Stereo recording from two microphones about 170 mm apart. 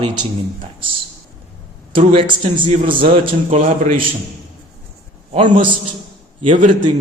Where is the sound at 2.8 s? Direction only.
55° right (ahead or behind).